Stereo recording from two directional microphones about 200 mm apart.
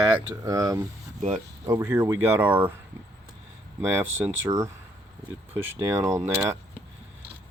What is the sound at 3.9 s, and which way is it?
Speech, 10° right (ahead or behind).